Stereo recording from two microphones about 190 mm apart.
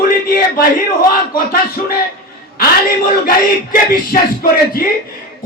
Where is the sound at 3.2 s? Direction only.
50° left (ahead or behind).